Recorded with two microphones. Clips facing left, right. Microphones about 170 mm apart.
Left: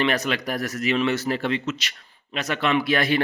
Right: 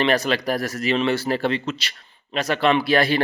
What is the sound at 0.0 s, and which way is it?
Speech, 30° right (ahead or behind).